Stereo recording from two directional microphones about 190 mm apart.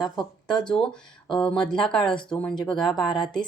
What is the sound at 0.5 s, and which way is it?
Speech, 5° left (ahead or behind).